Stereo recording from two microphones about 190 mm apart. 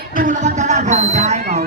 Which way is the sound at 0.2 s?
40° right (ahead or behind).